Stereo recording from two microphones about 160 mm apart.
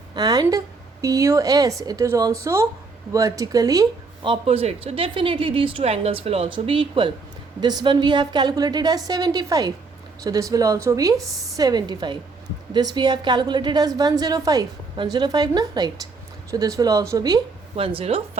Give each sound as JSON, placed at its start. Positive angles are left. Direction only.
{"t": 0.1, "sound": "a woman's voice", "side_deg": -25}
{"t": 17.7, "sound": "speech", "side_deg": -35}